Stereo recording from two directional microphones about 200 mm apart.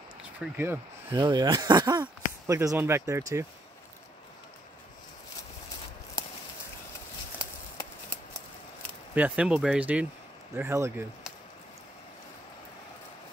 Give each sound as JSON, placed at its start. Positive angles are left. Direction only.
{"t": 0.4, "sound": "speech", "side_deg": -10}
{"t": 7.7, "sound": "a sound", "side_deg": 10}
{"t": 9.1, "sound": "speech", "side_deg": -5}